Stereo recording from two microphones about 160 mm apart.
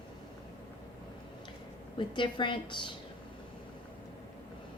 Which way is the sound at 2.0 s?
30° left (ahead or behind).